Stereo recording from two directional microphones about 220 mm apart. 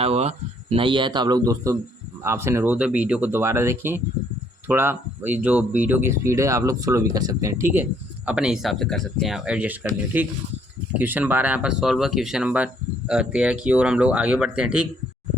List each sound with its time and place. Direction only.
0.0 s speech: 30° right (ahead or behind); by 14.8 s 5° right (ahead or behind)